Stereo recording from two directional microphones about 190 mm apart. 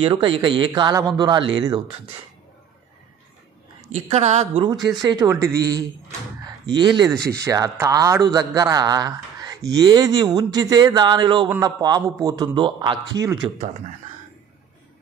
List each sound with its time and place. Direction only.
0.0 s a man's voice: 30° right (ahead or behind)
3.9 s a woman's voice: 35° right (ahead or behind)
4.9 s a man's voice: 20° right (ahead or behind)